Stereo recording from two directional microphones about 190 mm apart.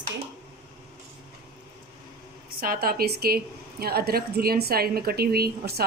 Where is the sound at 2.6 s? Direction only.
50° right (ahead or behind).